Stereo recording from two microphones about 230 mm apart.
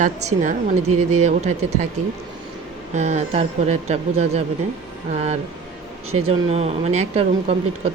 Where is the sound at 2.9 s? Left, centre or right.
Right.